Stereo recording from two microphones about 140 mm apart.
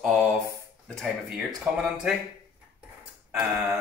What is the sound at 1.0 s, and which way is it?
Speech, 5° right (ahead or behind).